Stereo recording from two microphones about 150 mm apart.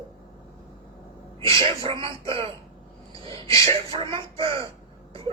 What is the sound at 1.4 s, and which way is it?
A man's voice, 40° right (ahead or behind).